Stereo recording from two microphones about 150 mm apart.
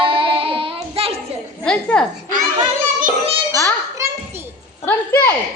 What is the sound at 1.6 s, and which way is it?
Speech, 5° left (ahead or behind).